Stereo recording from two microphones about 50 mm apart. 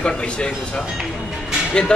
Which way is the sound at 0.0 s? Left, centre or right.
Centre.